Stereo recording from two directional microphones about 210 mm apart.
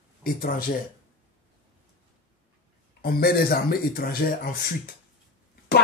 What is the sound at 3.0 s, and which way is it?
Speech, 45° left (ahead or behind).